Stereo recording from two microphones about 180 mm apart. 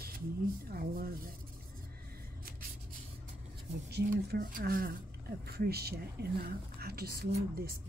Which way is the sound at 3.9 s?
55° right (ahead or behind).